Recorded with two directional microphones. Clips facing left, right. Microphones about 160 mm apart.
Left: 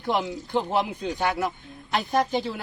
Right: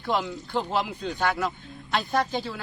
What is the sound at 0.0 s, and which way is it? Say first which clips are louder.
A man's voice: left 1 dB; 15° left (ahead or behind).